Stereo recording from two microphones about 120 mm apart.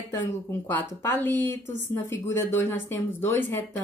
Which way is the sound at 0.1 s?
20° left (ahead or behind).